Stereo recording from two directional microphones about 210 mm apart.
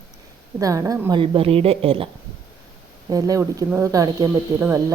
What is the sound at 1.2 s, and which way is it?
Speech, 25° right (ahead or behind).